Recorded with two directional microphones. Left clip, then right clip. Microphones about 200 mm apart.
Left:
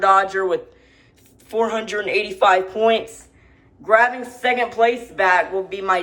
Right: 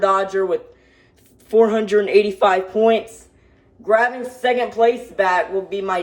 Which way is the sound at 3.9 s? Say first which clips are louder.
Left 1 dB; 25° right (ahead or behind).